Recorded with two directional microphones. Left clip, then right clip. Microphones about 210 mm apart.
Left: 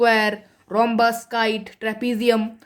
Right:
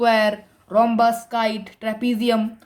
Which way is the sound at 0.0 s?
30° left (ahead or behind).